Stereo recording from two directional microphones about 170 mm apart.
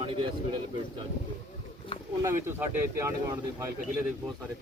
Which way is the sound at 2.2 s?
15° right (ahead or behind).